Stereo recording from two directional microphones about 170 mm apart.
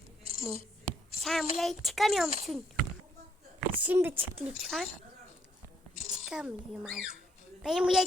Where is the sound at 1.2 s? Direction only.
Centre (ahead or behind).